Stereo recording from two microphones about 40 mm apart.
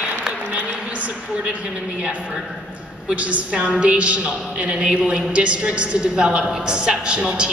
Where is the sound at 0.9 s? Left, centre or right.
Right.